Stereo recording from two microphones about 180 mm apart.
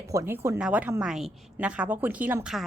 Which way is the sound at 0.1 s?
15° right (ahead or behind).